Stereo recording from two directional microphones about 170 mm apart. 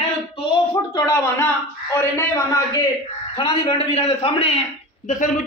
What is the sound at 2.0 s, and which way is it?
Speech, 15° left (ahead or behind).